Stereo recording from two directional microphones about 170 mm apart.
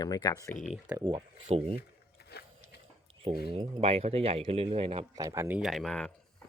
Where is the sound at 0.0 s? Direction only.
25° left (ahead or behind).